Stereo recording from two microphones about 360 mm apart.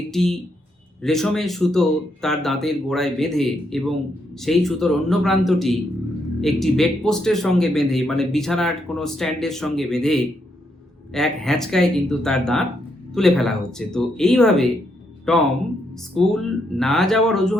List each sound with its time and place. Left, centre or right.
0.1 s a man's voice: centre